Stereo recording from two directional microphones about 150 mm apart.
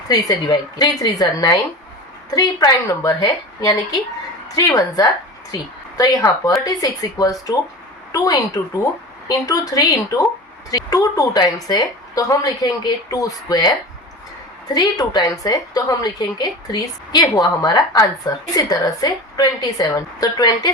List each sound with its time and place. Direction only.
0.1 s a woman's voice: 25° left (ahead or behind)